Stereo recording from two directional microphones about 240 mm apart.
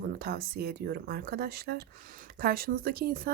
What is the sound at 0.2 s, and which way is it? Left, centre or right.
Speech, right.